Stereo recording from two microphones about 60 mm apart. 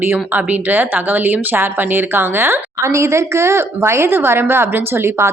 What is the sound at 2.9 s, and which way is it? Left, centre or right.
A woman's voice, right.